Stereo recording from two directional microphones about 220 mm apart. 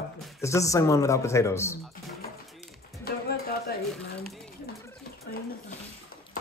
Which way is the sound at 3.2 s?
45° left (ahead or behind).